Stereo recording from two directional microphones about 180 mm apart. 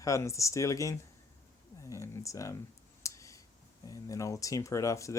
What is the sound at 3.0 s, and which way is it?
Clicking, 15° left (ahead or behind).